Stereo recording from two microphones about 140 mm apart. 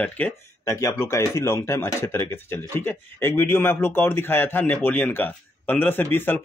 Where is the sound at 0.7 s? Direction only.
20° left (ahead or behind).